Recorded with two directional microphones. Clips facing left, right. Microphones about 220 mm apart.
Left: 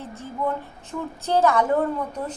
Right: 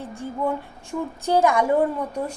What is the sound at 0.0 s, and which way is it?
A woman's voice, 15° right (ahead or behind).